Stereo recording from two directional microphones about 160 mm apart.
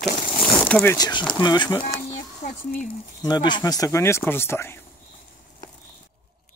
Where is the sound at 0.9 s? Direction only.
25° left (ahead or behind).